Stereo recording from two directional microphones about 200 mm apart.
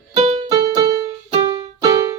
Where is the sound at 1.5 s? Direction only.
20° right (ahead or behind).